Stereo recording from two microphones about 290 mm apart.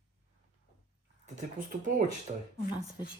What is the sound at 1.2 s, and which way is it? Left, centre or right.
Speech, right.